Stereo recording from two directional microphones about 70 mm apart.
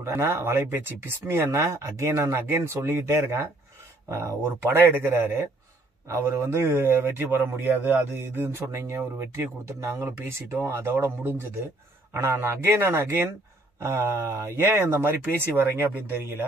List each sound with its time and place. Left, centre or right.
0.0 s a man's voice: right
4.4 s a man's voice: right
6.0 s a man's voice: right